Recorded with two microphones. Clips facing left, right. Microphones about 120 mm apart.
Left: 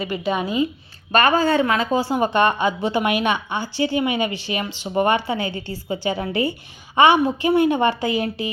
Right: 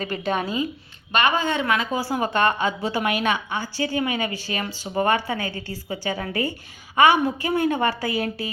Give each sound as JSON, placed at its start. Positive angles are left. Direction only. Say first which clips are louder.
{"t": 0.0, "sound": "a woman's voice", "louder": "left 2 dB", "side_deg": 10}
{"t": 1.1, "sound": "a woman's voice", "louder": "left 5 dB", "side_deg": 40}